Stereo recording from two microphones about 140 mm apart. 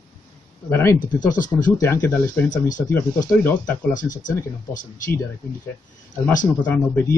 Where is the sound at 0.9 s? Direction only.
75° left (ahead or behind).